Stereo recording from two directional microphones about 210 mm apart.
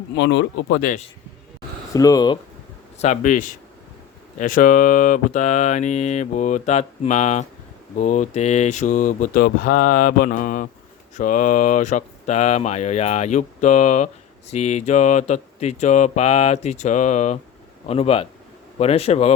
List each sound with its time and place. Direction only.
0.2 s speech: 55° left (ahead or behind)
1.9 s speech: 15° left (ahead or behind)
3.0 s speech: 35° left (ahead or behind)